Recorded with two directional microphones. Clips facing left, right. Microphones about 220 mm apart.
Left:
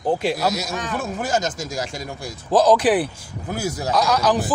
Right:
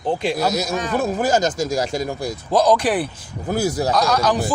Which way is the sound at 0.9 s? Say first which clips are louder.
Right 5 dB; 40° right (ahead or behind).